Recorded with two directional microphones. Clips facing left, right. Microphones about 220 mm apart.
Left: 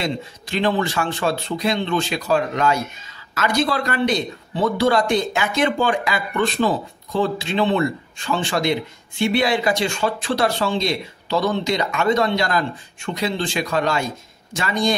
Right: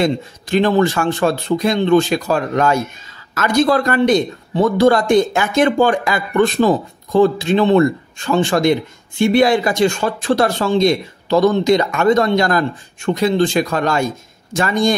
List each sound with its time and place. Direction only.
0.0 s speech: 45° right (ahead or behind)